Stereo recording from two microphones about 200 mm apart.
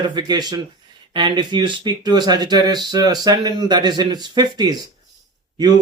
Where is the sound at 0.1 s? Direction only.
20° right (ahead or behind).